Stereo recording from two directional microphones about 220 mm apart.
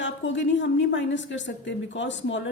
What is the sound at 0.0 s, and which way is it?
A woman's voice, 55° left (ahead or behind).